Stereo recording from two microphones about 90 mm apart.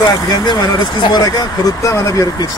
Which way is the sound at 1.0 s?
50° left (ahead or behind).